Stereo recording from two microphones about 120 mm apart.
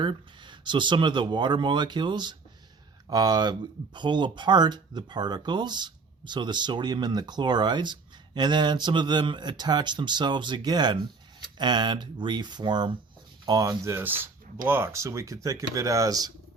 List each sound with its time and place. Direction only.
0.0 s speech: 40° right (ahead or behind)